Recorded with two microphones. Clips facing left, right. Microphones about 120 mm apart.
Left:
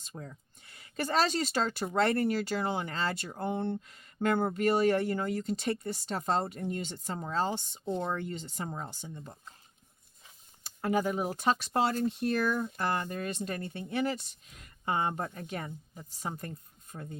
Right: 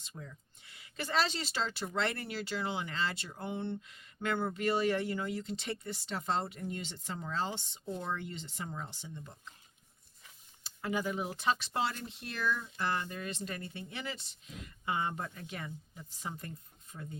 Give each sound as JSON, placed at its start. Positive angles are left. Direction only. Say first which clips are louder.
{"t": 0.0, "sound": "speech", "louder": "left 4 dB", "side_deg": 45}
{"t": 10.8, "sound": "speech", "louder": "left 5 dB", "side_deg": 45}